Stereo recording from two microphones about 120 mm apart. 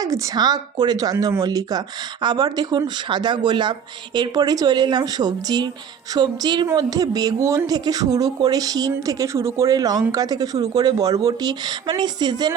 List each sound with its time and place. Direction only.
0.0 s speech: 30° right (ahead or behind)